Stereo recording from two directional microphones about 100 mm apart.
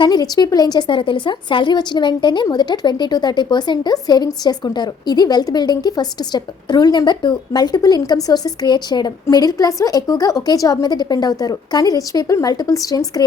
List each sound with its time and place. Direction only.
0.0 s a woman's voice: 40° left (ahead or behind)